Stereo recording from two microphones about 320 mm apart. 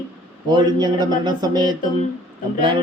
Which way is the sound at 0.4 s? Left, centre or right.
Centre.